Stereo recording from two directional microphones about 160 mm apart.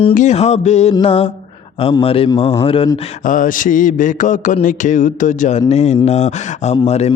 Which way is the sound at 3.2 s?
55° left (ahead or behind).